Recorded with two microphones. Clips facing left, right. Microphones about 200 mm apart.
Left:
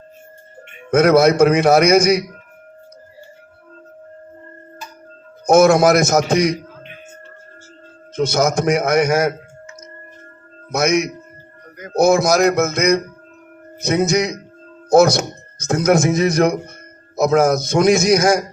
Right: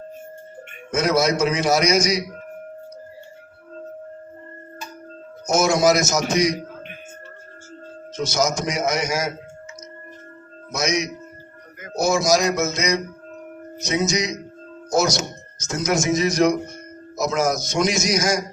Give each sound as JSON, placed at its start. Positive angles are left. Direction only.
{"t": 0.9, "sound": "a man's voice", "side_deg": 60}
{"t": 5.5, "sound": "a man's voice", "side_deg": 55}
{"t": 8.1, "sound": "a man's voice", "side_deg": 55}
{"t": 10.7, "sound": "a man's voice", "side_deg": 55}